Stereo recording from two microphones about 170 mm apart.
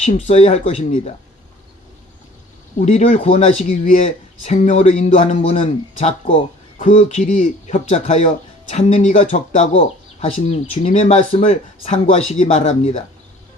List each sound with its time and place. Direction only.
0.0 s speech: 45° left (ahead or behind)
2.8 s speech: 45° left (ahead or behind)
6.2 s speech: 50° left (ahead or behind)